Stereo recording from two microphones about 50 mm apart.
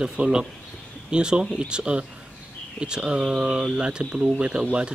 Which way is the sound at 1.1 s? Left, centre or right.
Centre.